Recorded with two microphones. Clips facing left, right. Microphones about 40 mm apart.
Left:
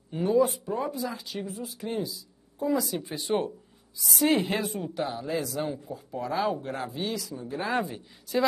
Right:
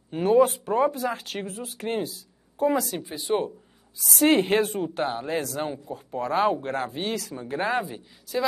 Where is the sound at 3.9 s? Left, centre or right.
Right.